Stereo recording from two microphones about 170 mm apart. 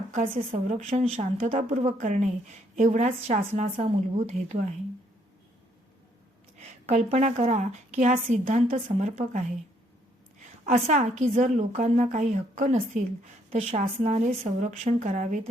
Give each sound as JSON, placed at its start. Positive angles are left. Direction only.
{"t": 0.1, "sound": "a woman's voice", "side_deg": -45}
{"t": 6.6, "sound": "a woman's voice", "side_deg": -40}